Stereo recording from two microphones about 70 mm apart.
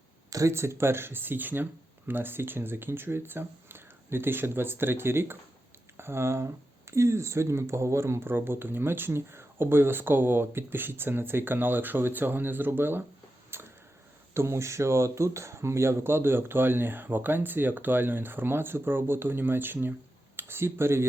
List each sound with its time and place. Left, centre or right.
0.3 s a sound: right
0.5 s speech: right
13.5 s tick-tock: right
14.3 s speech: right